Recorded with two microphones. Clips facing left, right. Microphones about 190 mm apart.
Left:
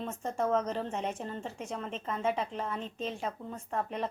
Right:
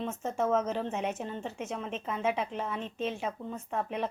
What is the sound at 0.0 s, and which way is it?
A woman's voice, centre (ahead or behind).